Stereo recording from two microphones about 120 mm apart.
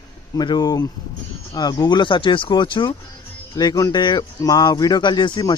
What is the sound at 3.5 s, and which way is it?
Speech, 30° left (ahead or behind).